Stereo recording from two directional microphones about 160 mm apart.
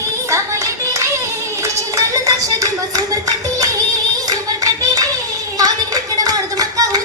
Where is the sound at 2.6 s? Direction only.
20° right (ahead or behind).